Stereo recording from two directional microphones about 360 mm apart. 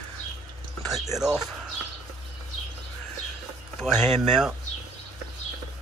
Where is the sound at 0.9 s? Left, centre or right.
Centre.